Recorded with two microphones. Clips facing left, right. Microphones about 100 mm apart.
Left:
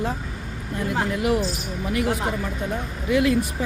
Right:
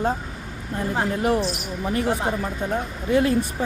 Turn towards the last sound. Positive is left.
turn(degrees=-35)  # may be behind; listen again after turning